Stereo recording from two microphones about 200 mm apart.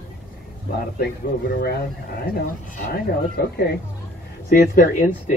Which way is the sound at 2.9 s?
50° left (ahead or behind).